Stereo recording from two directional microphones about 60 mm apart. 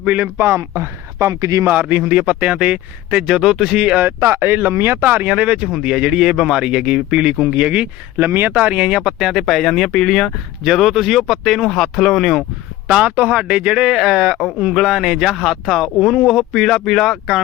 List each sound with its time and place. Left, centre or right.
0.0 s a man's voice: right
0.4 s speech: right
1.3 s speech: right
1.6 s a man's voice: right
3.2 s speech: centre
4.2 s speech: right; by 7.9 s centre
8.2 s speech: right
8.5 s speech: right
9.4 s speech: centre
10.6 s speech: centre
12.9 s speech: centre